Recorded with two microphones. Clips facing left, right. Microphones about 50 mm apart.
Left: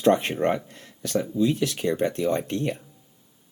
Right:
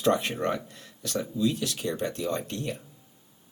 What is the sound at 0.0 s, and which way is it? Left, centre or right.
Speech, left.